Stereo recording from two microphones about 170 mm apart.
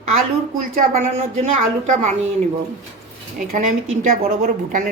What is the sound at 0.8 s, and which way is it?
Speech, 50° right (ahead or behind).